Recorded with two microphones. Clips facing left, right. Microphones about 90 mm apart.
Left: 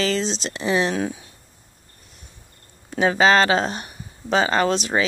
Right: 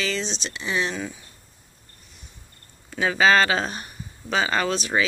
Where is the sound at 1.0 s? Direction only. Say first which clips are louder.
Left 7 dB; 60° left (ahead or behind).